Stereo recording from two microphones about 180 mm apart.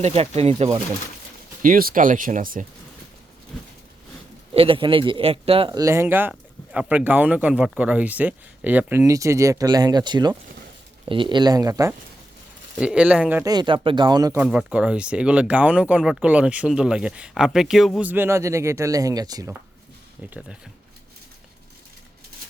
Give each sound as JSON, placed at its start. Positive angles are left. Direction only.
{"t": 0.0, "sound": "speech", "side_deg": -35}
{"t": 1.6, "sound": "speech", "side_deg": -50}
{"t": 4.5, "sound": "speech", "side_deg": -30}
{"t": 12.8, "sound": "speech", "side_deg": -5}
{"t": 13.4, "sound": "speech", "side_deg": -20}
{"t": 14.4, "sound": "speech", "side_deg": -5}